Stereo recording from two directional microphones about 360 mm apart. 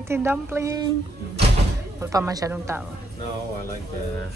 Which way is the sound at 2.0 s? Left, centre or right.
Centre.